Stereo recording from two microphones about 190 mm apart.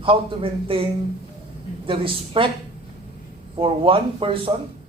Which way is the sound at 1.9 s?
25° right (ahead or behind).